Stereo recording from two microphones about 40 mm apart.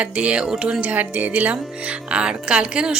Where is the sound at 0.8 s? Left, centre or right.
Right.